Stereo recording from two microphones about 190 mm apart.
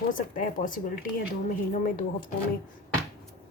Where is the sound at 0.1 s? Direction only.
45° left (ahead or behind).